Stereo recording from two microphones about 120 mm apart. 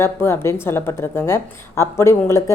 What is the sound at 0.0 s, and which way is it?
Speech, 20° left (ahead or behind).